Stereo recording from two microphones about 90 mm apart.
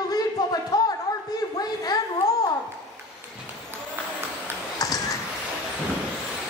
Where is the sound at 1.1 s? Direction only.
40° left (ahead or behind).